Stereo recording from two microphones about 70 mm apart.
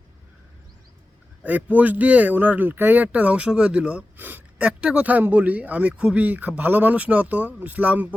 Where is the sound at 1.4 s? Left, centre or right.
Right.